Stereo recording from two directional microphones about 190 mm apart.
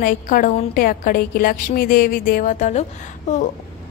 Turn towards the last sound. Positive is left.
turn(degrees=40)  # may be behind; listen again after turning